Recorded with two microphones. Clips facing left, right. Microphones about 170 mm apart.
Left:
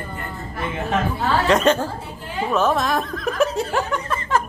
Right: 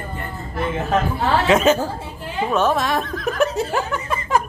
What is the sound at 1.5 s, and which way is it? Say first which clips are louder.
Speech: right 1 dB; 5° right (ahead or behind).